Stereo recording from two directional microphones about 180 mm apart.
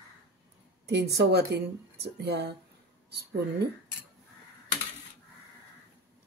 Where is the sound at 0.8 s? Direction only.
70° right (ahead or behind).